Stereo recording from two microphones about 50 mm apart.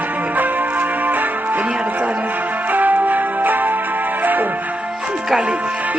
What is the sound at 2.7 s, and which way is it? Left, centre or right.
Music, right.